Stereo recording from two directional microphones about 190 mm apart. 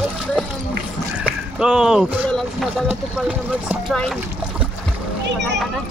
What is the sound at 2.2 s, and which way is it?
Speech, 5° left (ahead or behind).